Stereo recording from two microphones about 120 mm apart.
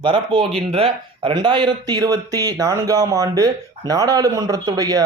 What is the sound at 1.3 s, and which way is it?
Speech, 40° right (ahead or behind).